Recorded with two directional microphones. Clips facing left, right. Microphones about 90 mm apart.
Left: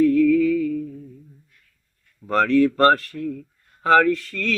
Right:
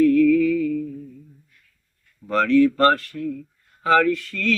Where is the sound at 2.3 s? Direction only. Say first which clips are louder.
Right 1 dB; 40° left (ahead or behind).